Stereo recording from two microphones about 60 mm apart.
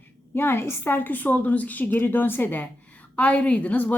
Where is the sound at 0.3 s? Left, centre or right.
Left.